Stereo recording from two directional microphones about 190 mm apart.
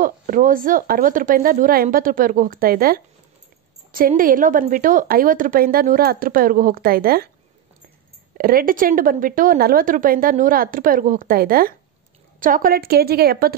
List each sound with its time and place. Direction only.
0.0 s a woman's voice: 45° right (ahead or behind)
4.1 s a woman's voice: 45° right (ahead or behind)
8.4 s a woman's voice: 50° right (ahead or behind)